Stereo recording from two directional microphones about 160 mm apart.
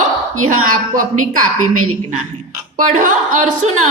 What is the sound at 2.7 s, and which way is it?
Speech, 55° right (ahead or behind).